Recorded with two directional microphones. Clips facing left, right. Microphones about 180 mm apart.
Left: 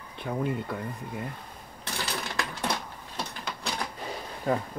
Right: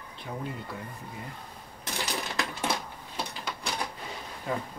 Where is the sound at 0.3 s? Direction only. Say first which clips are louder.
Left 7 dB; 65° left (ahead or behind).